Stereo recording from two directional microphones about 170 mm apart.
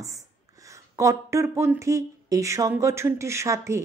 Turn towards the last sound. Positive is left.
turn(degrees=-15)  # may be behind; listen again after turning